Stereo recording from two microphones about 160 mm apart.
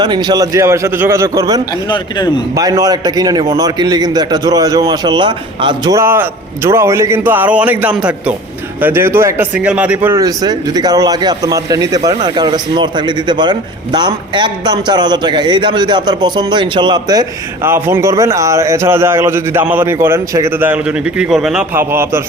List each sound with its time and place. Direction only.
0.0 s a man's voice: 25° right (ahead or behind)
1.9 s a man's voice: 25° left (ahead or behind)
2.6 s a man's voice: 20° right (ahead or behind)